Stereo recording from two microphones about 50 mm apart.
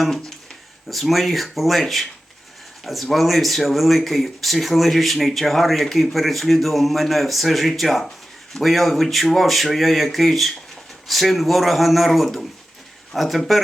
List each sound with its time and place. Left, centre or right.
0.9 s speech: centre